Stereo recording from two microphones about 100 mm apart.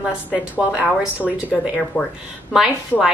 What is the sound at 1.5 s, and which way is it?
Speech, centre (ahead or behind).